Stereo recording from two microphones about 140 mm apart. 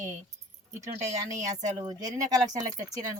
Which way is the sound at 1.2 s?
25° right (ahead or behind).